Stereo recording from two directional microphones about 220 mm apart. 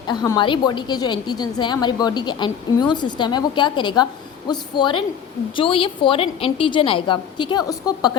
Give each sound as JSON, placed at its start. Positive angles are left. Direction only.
{"t": 0.1, "sound": "a woman's voice", "side_deg": 20}